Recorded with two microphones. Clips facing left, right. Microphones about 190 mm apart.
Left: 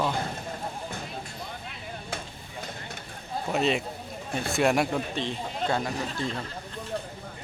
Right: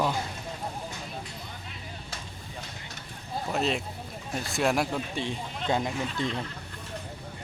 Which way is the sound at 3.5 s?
Centre (ahead or behind).